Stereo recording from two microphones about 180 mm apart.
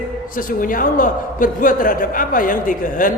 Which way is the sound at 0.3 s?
50° left (ahead or behind).